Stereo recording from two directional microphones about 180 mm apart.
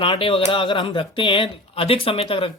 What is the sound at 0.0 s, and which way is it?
Speech, 30° left (ahead or behind).